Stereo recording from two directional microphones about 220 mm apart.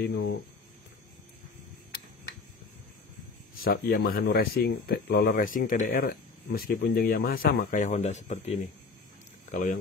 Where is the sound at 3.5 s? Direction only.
40° left (ahead or behind).